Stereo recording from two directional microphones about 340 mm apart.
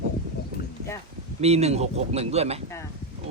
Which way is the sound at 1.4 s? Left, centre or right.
Centre.